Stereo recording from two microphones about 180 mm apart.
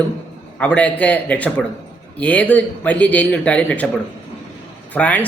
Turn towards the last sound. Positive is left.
turn(degrees=10)  # may be behind; listen again after turning